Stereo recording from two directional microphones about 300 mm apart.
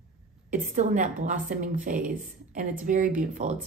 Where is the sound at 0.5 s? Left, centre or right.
Right.